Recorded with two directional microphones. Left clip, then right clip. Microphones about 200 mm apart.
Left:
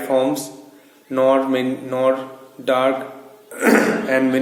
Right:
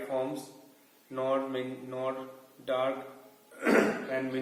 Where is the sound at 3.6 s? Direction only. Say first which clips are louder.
Left 11 dB; 50° left (ahead or behind).